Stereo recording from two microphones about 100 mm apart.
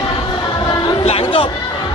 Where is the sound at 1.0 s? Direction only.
70° left (ahead or behind).